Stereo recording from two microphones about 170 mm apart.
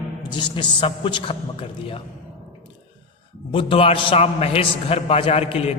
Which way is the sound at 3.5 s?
30° left (ahead or behind).